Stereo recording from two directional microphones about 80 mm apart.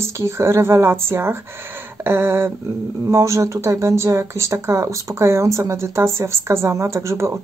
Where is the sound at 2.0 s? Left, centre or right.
Right.